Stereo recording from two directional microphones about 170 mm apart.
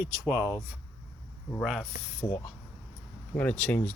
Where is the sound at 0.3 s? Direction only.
15° right (ahead or behind).